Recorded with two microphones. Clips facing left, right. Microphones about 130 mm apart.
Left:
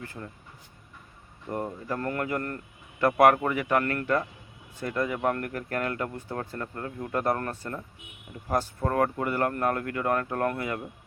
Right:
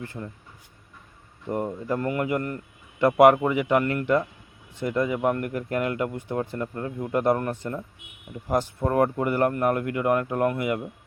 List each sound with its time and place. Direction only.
0.0 s speech: 25° right (ahead or behind)
1.5 s speech: 20° right (ahead or behind)